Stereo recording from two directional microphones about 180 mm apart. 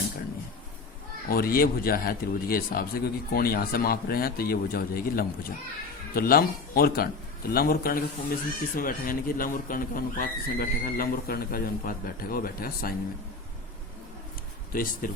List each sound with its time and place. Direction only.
1.3 s speech: 55° left (ahead or behind)
14.7 s speech: 50° left (ahead or behind)